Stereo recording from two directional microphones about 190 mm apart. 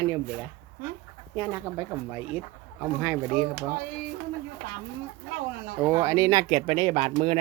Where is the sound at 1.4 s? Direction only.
10° right (ahead or behind).